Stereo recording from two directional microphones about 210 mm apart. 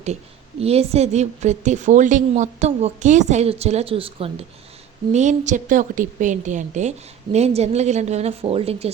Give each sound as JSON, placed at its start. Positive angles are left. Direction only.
{"t": 0.6, "sound": "a woman's voice", "side_deg": -30}